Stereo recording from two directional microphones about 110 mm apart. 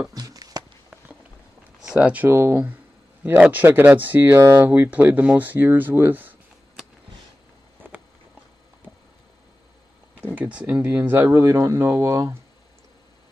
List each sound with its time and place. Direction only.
0.1 s a sound: 35° right (ahead or behind)
1.8 s speech: 10° right (ahead or behind)
10.3 s speech: 15° right (ahead or behind)